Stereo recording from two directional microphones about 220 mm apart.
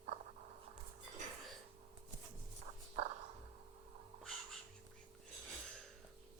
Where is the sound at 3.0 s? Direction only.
30° right (ahead or behind).